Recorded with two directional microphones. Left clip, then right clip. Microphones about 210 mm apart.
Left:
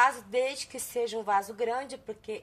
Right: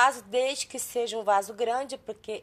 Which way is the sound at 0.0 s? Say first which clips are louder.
Right 2 dB; 35° right (ahead or behind).